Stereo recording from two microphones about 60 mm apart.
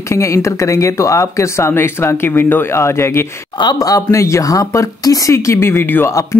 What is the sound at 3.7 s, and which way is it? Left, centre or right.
Speech, left.